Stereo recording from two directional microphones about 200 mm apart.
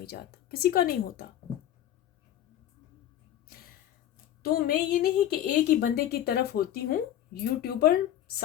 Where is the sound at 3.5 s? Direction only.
50° left (ahead or behind).